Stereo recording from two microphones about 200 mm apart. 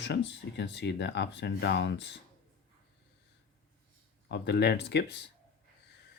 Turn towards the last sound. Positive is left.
turn(degrees=60)  # may be behind; listen again after turning